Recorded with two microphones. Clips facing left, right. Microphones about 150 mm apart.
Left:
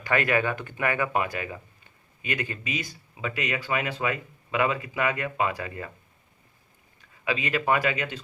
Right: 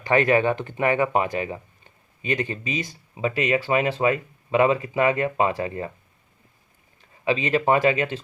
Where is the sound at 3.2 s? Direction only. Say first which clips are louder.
Right 8 dB; 35° right (ahead or behind).